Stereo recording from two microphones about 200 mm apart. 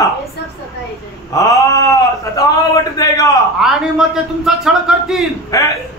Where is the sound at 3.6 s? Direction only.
5° right (ahead or behind).